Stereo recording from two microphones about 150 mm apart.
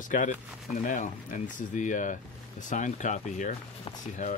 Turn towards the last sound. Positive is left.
turn(degrees=60)  # may be behind; listen again after turning